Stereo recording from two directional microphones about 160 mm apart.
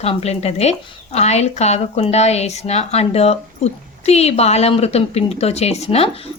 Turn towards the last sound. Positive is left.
turn(degrees=40)  # may be behind; listen again after turning